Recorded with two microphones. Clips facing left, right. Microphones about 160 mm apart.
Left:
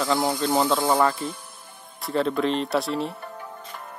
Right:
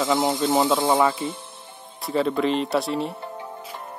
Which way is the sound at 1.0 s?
5° right (ahead or behind).